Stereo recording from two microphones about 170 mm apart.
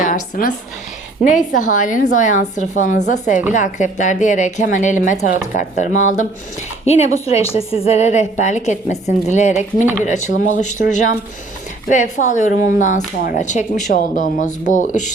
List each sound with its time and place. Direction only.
0.0 s a woman's voice: 50° left (ahead or behind)
9.6 s speech: 10° right (ahead or behind)
10.0 s speech: 45° left (ahead or behind)